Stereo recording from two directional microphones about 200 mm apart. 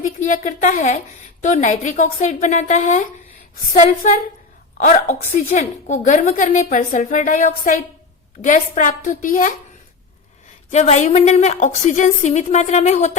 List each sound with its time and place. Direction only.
0.2 s a woman's voice: 40° left (ahead or behind)
10.7 s a woman's voice: 35° left (ahead or behind)